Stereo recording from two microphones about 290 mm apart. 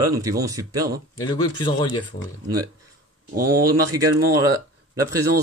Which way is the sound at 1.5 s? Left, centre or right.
Centre.